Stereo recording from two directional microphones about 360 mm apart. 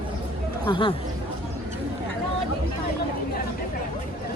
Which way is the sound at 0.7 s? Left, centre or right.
Centre.